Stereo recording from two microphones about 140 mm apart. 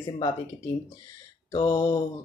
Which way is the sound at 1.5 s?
30° left (ahead or behind).